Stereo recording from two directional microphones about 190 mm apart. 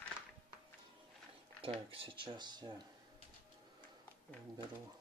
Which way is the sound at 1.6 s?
30° right (ahead or behind).